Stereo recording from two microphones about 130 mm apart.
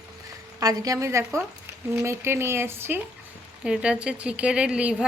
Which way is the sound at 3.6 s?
5° right (ahead or behind).